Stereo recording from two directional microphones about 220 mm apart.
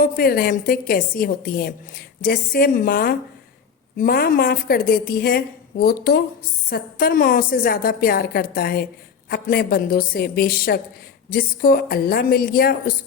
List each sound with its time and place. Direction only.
0.0 s a woman's voice: 45° left (ahead or behind)